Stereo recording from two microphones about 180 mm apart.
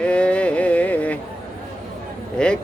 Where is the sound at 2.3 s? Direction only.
5° left (ahead or behind).